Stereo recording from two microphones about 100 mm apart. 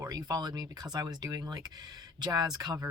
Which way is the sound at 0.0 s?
40° right (ahead or behind).